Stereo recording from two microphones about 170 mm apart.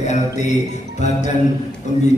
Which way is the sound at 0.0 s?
40° left (ahead or behind).